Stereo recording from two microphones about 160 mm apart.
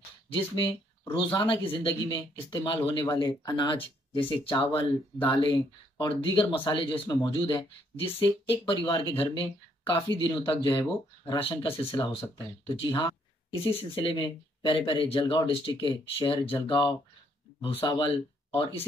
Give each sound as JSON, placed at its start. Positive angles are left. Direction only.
{"t": 0.3, "sound": "speech", "side_deg": 30}
{"t": 10.1, "sound": "speech", "side_deg": 30}